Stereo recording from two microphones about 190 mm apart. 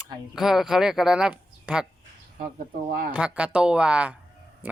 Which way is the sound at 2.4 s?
45° right (ahead or behind).